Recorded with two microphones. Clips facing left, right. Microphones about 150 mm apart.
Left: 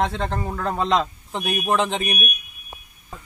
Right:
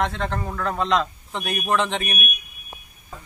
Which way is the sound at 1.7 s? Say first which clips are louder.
Right 1 dB; 35° left (ahead or behind).